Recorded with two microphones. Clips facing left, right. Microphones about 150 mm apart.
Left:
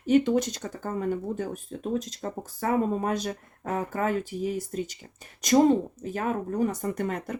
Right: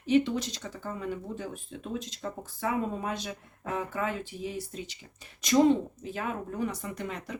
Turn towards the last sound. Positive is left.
turn(degrees=50)  # may be behind; listen again after turning